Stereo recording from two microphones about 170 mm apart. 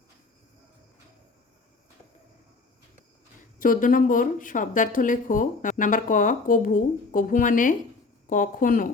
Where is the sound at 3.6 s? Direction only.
55° left (ahead or behind).